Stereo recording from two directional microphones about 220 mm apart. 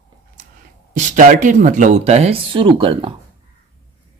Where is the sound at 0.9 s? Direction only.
35° right (ahead or behind).